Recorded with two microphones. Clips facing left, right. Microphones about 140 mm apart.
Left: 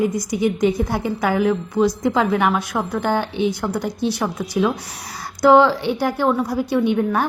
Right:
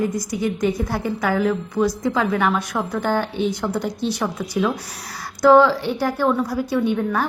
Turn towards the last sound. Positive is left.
turn(degrees=15)  # may be behind; listen again after turning